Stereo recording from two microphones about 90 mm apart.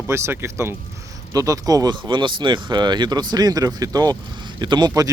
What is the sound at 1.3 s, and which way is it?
Speech, 40° right (ahead or behind).